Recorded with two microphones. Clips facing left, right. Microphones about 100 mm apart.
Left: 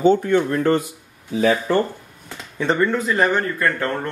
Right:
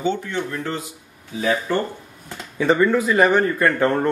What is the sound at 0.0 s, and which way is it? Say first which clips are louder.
Speech: left 8 dB; 45° left (ahead or behind).